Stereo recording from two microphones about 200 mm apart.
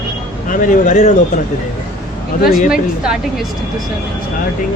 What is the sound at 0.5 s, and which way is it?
Speech, 40° left (ahead or behind).